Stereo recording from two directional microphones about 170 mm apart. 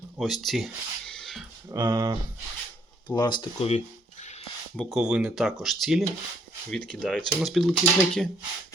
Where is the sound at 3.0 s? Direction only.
25° left (ahead or behind); by 4.4 s 40° left (ahead or behind).